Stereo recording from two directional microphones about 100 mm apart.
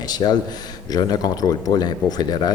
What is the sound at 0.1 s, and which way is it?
A man's voice, 45° left (ahead or behind).